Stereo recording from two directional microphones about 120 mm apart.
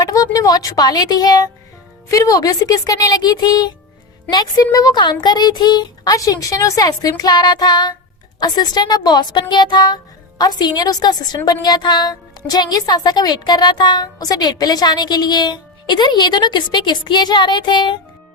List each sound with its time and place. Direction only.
0.0 s a woman's voice: 30° left (ahead or behind)